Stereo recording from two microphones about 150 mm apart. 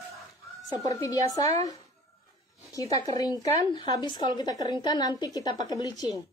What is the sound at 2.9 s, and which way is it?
A woman's voice, 25° left (ahead or behind).